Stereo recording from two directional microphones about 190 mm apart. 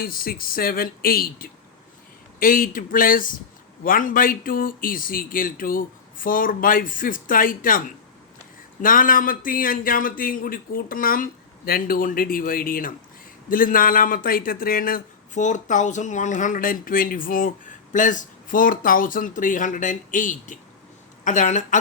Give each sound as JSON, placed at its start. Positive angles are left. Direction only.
{"t": 0.0, "sound": "a man's voice", "side_deg": 50}
{"t": 8.8, "sound": "a man's voice", "side_deg": 45}